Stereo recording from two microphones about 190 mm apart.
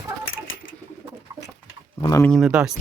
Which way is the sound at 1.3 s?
20° right (ahead or behind).